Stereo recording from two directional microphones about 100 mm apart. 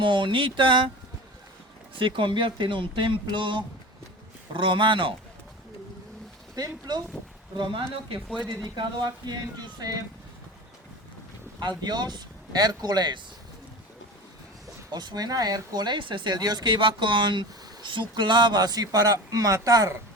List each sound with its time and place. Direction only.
0.0 s speech: 55° right (ahead or behind)
2.0 s speech: 55° right (ahead or behind)
6.6 s speech: 45° right (ahead or behind)
11.8 s speech: 45° right (ahead or behind)
14.9 s speech: 40° right (ahead or behind)